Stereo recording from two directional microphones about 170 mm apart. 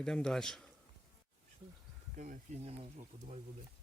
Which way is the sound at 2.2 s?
55° right (ahead or behind).